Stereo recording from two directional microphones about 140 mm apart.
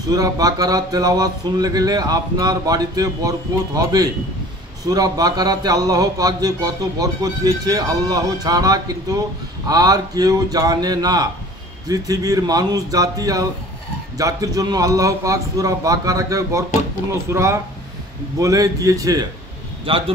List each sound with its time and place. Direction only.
0.1 s speech: 25° right (ahead or behind)
19.8 s a man's voice: 40° right (ahead or behind)